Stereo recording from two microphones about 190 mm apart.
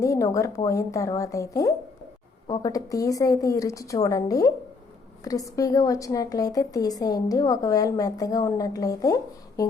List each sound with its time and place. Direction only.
0.0 s a woman's voice: 15° left (ahead or behind)